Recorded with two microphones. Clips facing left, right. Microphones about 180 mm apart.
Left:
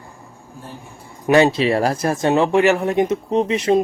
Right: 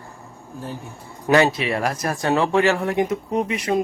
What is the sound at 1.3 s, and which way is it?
Speech, 25° left (ahead or behind).